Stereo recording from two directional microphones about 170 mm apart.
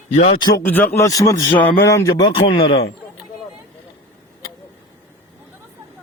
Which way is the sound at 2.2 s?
30° left (ahead or behind).